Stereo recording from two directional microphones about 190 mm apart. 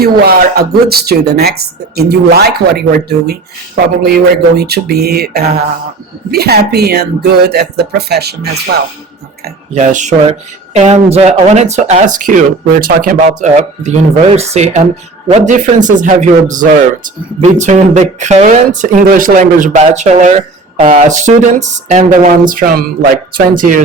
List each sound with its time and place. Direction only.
0.0 s speech: 55° right (ahead or behind)
9.7 s speech: 40° right (ahead or behind)